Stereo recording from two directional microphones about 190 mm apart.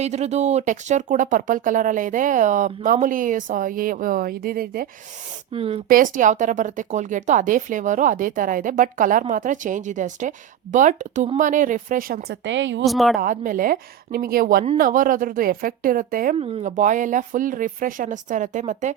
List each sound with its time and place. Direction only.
0.0 s speech: 35° right (ahead or behind)
5.5 s a woman's voice: 30° right (ahead or behind)
5.9 s speech: 45° right (ahead or behind)
12.5 s speech: 75° right (ahead or behind)
12.8 s a woman's voice: centre (ahead or behind)
13.1 s speech: 45° right (ahead or behind)
16.4 s speech: 30° right (ahead or behind)
16.6 s speech: 40° right (ahead or behind)